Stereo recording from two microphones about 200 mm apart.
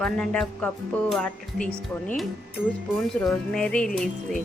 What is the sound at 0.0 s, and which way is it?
Music, 5° left (ahead or behind).